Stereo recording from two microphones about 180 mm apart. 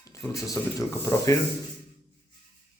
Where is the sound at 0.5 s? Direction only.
15° left (ahead or behind).